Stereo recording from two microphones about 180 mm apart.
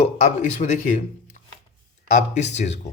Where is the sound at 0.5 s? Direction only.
40° left (ahead or behind).